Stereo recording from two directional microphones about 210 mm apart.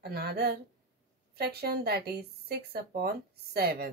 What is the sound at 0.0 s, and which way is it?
Speech, 50° right (ahead or behind).